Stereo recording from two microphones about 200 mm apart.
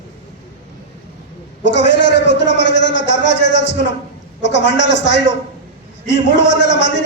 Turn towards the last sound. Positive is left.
turn(degrees=60)  # may be behind; listen again after turning